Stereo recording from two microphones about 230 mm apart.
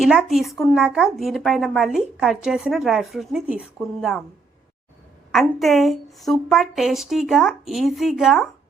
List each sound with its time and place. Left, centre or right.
0.2 s speech: centre
5.3 s speech: centre